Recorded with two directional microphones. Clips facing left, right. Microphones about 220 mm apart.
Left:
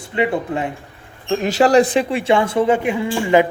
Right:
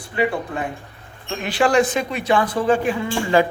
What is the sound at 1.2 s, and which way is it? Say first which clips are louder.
Speech: left 5 dB; 40° left (ahead or behind).